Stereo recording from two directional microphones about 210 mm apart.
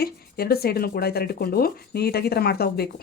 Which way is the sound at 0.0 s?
50° left (ahead or behind).